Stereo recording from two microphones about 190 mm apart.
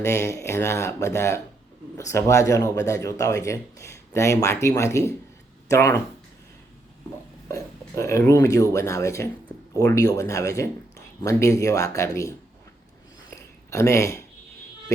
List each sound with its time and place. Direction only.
0.0 s speech: 15° left (ahead or behind)
7.4 s speech: 15° left (ahead or behind)
13.7 s speech: 15° left (ahead or behind)